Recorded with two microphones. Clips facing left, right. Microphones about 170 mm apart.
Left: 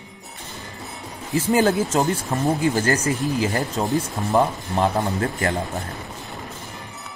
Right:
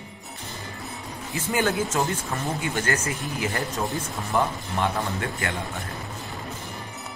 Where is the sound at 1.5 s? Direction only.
35° left (ahead or behind).